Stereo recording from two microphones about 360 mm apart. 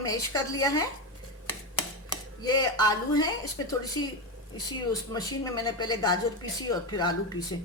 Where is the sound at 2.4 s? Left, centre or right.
Centre.